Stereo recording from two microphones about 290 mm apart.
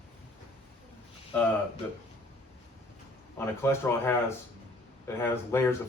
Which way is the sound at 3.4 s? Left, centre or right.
Centre.